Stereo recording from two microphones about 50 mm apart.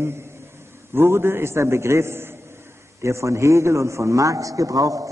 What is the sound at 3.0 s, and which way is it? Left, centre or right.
A man's voice, right.